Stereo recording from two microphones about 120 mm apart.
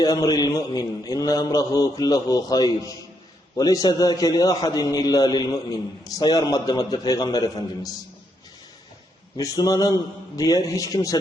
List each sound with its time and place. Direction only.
0.0 s a man's voice: 35° left (ahead or behind)
9.4 s a man's voice: 30° left (ahead or behind)